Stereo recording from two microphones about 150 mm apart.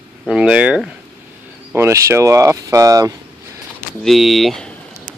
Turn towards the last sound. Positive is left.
turn(degrees=0)  # may be behind; listen again after turning